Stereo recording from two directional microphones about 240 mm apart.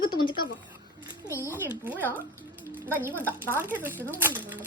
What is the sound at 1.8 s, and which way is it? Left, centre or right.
Speech, centre.